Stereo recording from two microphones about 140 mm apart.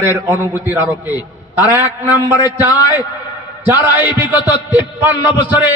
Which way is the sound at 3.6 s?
15° right (ahead or behind).